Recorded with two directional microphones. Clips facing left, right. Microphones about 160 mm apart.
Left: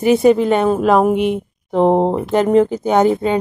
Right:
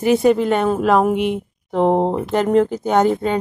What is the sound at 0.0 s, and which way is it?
Speech, 20° left (ahead or behind).